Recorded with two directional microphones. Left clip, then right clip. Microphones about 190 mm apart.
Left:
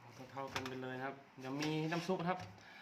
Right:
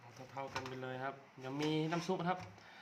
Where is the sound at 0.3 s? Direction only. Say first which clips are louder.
Even; 20° right (ahead or behind).